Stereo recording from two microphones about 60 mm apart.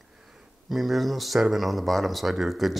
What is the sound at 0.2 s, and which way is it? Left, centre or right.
Speech, centre.